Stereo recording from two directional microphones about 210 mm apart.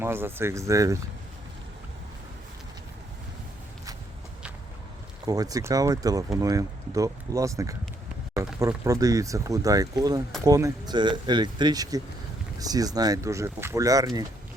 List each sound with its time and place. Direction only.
0.0 s speech: 10° right (ahead or behind)
5.2 s speech: 15° right (ahead or behind)